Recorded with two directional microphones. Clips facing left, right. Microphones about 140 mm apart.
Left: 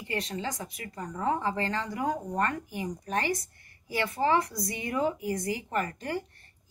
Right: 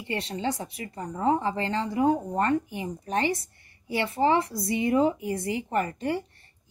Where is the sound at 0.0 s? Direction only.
30° right (ahead or behind).